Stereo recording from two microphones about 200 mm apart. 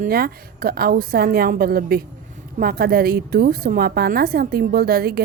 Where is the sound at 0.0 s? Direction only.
50° right (ahead or behind).